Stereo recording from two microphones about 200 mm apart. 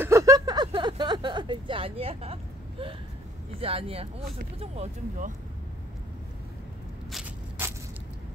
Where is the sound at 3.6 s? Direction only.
30° right (ahead or behind).